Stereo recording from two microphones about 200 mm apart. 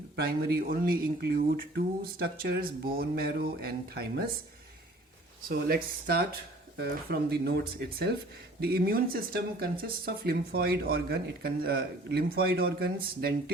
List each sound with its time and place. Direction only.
0.2 s speech: 50° right (ahead or behind)
5.5 s speech: 50° right (ahead or behind)